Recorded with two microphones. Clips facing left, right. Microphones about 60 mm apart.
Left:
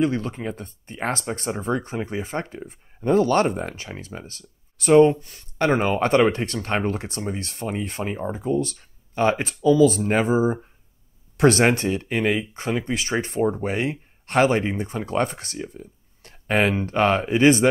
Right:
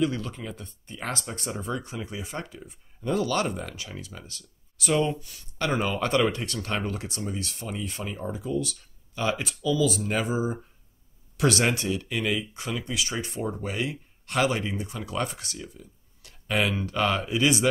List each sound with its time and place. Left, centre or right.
0.0 s speech: left